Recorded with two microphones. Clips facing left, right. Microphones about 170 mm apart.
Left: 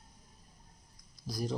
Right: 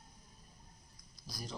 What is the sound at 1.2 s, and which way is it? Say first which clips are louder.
Speech: left 11 dB; 55° left (ahead or behind).